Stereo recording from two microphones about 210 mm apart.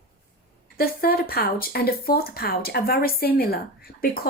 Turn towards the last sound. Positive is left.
turn(degrees=45)  # may be behind; listen again after turning